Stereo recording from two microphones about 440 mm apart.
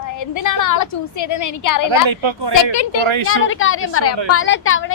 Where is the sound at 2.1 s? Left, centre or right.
Right.